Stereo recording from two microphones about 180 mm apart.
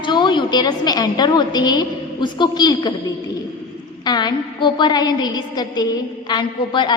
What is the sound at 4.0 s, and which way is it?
A woman's voice, 25° left (ahead or behind).